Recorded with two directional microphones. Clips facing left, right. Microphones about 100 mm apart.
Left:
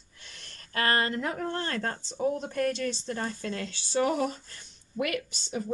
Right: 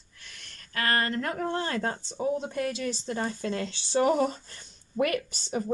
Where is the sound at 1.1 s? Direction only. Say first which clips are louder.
Right 1 dB; 10° left (ahead or behind).